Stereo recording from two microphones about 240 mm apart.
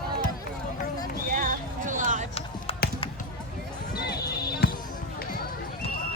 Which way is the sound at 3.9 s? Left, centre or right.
Left.